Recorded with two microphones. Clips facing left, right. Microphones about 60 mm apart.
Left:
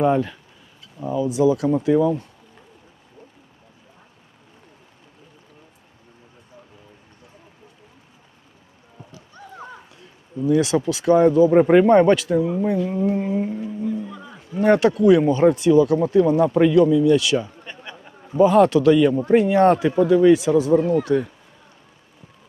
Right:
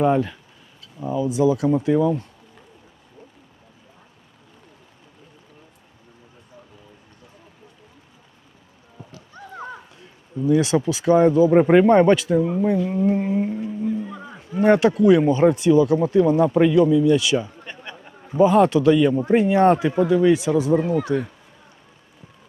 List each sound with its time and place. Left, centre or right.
0.0 s speech: centre
10.3 s speech: centre
14.3 s speech: centre